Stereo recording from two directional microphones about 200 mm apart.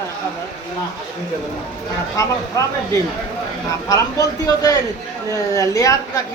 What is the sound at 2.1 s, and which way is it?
A man's voice, 15° left (ahead or behind).